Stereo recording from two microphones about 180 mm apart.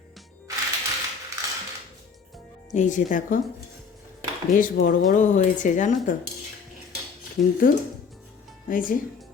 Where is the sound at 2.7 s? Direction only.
45° left (ahead or behind).